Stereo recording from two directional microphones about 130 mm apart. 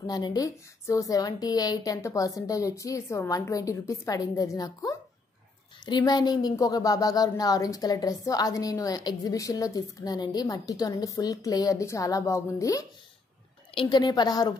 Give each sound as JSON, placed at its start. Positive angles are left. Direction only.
{"t": 0.0, "sound": "speech", "side_deg": 30}
{"t": 13.7, "sound": "a woman's voice", "side_deg": 35}